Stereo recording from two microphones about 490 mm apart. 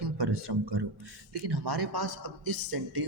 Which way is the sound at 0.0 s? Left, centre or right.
Right.